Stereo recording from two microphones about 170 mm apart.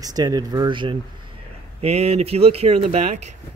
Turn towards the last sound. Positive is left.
turn(degrees=-40)  # may be behind; listen again after turning